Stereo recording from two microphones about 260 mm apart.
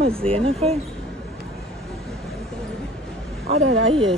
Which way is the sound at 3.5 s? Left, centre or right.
Right.